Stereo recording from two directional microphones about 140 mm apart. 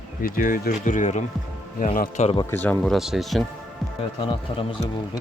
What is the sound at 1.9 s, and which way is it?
Speech, 80° left.